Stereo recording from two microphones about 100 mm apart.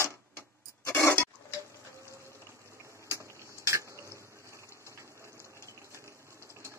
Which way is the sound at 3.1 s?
30° right (ahead or behind).